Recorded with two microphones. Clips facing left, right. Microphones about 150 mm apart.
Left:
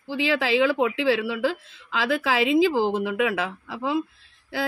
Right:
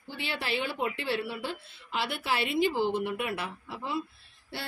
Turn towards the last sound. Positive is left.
turn(degrees=90)